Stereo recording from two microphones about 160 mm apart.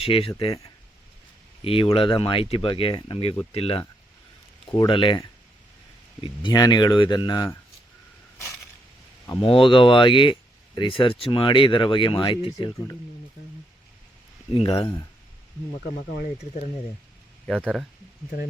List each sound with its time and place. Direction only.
0.0 s speech: 35° left (ahead or behind)
6.2 s speech: 25° left (ahead or behind)
9.2 s speech: 30° left (ahead or behind)
14.5 s speech: 35° left (ahead or behind)
16.0 s speech: 60° left (ahead or behind)
17.4 s speech: 5° left (ahead or behind)